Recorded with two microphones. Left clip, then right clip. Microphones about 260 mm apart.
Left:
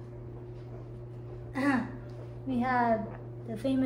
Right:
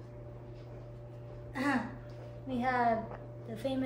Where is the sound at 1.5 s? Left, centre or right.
Centre.